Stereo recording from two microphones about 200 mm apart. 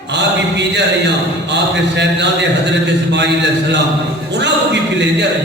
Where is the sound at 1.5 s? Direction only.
60° right (ahead or behind).